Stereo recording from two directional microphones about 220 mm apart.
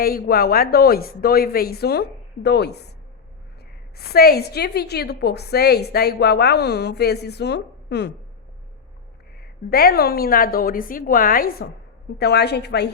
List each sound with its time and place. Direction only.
0.0 s a woman's voice: 45° left (ahead or behind)
4.1 s a woman's voice: 45° left (ahead or behind)
9.4 s a woman's voice: 45° left (ahead or behind)